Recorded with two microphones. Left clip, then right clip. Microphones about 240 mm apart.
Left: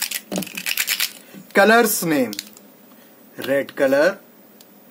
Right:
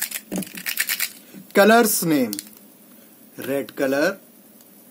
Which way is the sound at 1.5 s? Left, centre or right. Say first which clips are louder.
Left 1 dB; right.